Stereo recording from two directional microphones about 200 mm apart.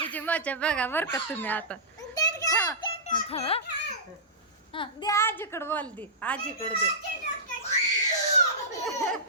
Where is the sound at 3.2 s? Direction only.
30° left (ahead or behind).